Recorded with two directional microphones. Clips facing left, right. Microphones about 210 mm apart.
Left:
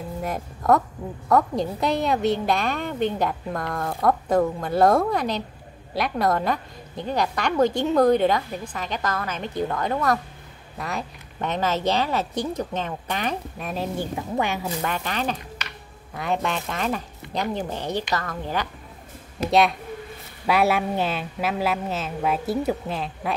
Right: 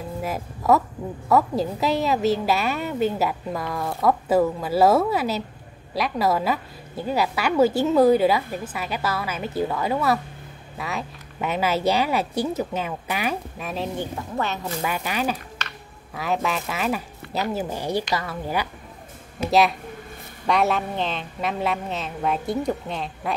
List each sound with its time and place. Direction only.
0.2 s a woman's voice: 5° right (ahead or behind)
14.4 s speech: 10° left (ahead or behind)
14.8 s a woman's voice: 10° right (ahead or behind)
20.4 s a woman's voice: 5° left (ahead or behind)